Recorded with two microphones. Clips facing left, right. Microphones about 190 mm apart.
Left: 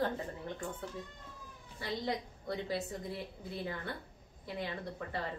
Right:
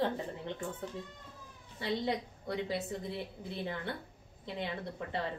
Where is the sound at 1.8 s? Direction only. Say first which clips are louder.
Right 3 dB; 25° right (ahead or behind).